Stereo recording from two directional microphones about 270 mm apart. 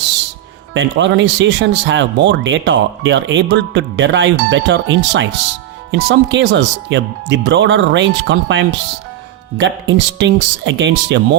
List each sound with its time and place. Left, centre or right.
0.7 s speech: right